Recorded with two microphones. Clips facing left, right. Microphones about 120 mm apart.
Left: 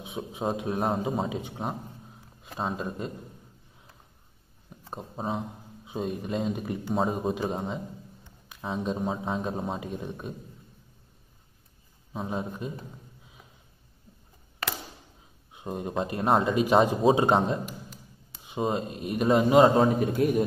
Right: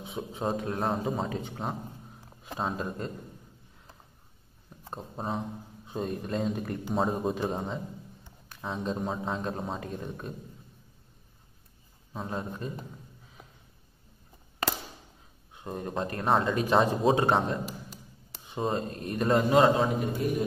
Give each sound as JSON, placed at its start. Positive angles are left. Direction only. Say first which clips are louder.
{"t": 0.0, "sound": "a man's voice", "louder": "left 1 dB", "side_deg": 0}
{"t": 4.9, "sound": "a man's voice", "louder": "left 2 dB", "side_deg": 5}
{"t": 12.1, "sound": "a man's voice", "louder": "left 3 dB", "side_deg": 5}
{"t": 15.5, "sound": "a man's voice", "louder": "left 3 dB", "side_deg": 15}
{"t": 17.6, "sound": "a sound", "louder": "right 1 dB", "side_deg": -35}
{"t": 18.6, "sound": "a man's voice", "louder": "left 2 dB", "side_deg": 5}
{"t": 19.8, "sound": "a man's voice", "louder": "left 5 dB", "side_deg": 50}